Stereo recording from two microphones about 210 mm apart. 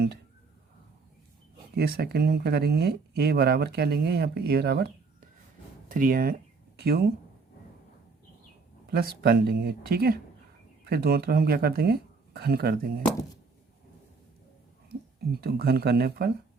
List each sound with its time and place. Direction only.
1.7 s speech: 50° right (ahead or behind)
8.9 s speech: 50° right (ahead or behind)
15.3 s speech: 50° right (ahead or behind)